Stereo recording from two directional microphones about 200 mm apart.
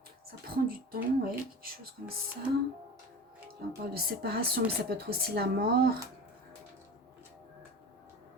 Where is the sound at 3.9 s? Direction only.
50° right (ahead or behind).